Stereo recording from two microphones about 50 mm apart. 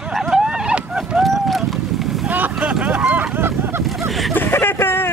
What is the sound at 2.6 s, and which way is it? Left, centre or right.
Vehicle, right.